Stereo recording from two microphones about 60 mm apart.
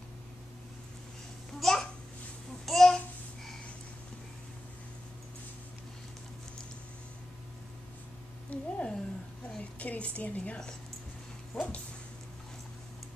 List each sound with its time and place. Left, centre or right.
1.6 s babbling: centre
8.5 s a sound: centre
9.6 s a woman's voice: left
11.5 s dog: centre